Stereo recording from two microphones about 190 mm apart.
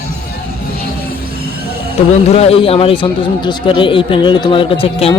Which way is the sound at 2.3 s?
30° left (ahead or behind).